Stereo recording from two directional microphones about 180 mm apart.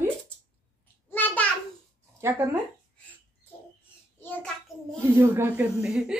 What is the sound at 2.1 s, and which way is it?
Speech, 15° right (ahead or behind).